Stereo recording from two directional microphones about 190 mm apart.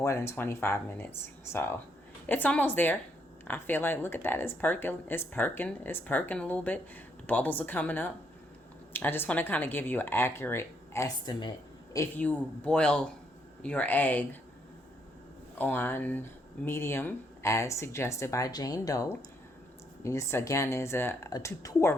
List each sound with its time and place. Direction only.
0.0 s speech: 15° left (ahead or behind)
11.9 s speech: 10° left (ahead or behind)
15.5 s speech: 10° left (ahead or behind)